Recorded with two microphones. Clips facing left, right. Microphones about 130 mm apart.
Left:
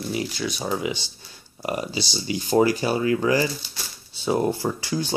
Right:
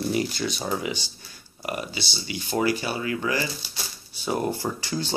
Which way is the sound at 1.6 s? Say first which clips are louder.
Left 4 dB; 30° left (ahead or behind).